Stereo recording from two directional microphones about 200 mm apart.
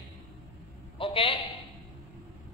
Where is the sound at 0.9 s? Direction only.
25° left (ahead or behind).